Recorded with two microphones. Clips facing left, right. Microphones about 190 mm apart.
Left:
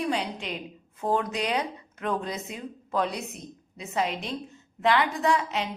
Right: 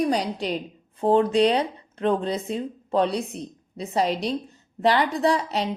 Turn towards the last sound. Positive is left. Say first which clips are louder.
# right 3 dB
turn(degrees=-35)  # may be behind; listen again after turning